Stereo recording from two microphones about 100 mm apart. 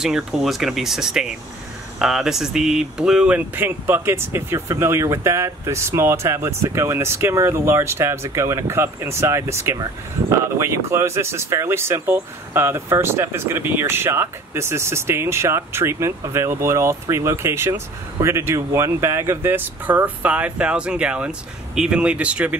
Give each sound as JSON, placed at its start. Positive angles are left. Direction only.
{"t": 0.0, "sound": "speech", "side_deg": -5}